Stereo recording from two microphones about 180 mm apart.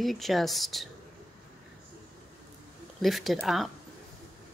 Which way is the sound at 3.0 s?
Centre (ahead or behind).